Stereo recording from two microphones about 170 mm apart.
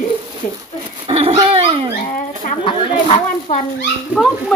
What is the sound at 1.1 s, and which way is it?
Dog, 35° right (ahead or behind).